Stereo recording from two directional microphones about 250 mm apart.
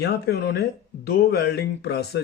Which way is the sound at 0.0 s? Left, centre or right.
Left.